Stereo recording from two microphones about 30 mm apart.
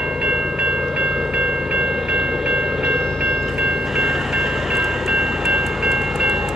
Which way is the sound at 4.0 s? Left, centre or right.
Centre.